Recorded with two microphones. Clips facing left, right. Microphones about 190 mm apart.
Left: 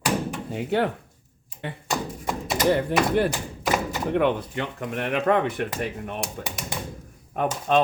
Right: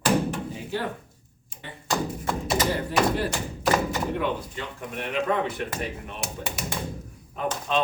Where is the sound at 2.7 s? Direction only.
55° left (ahead or behind).